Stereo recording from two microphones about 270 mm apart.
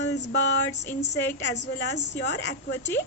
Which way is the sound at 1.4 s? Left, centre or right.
Left.